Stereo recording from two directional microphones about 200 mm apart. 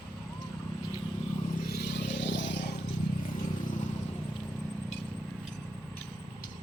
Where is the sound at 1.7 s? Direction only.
55° left (ahead or behind).